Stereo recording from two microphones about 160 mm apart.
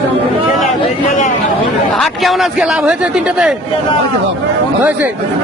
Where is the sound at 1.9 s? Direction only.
Centre (ahead or behind).